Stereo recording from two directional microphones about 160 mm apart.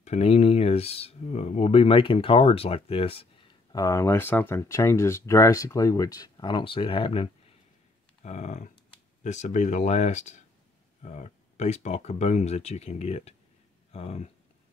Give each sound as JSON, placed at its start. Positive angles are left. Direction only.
{"t": 0.0, "sound": "speech", "side_deg": 40}
{"t": 3.7, "sound": "speech", "side_deg": 20}
{"t": 8.2, "sound": "speech", "side_deg": 45}